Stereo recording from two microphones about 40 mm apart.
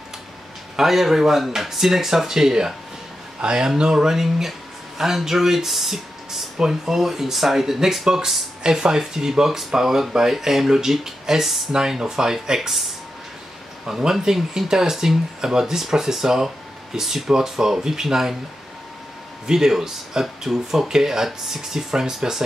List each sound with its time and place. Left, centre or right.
0.7 s speech: centre
13.8 s speech: centre
19.4 s speech: centre